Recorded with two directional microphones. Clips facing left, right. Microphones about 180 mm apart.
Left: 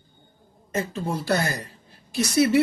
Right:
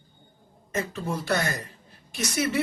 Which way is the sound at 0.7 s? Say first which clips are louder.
Left 2 dB; 30° left (ahead or behind).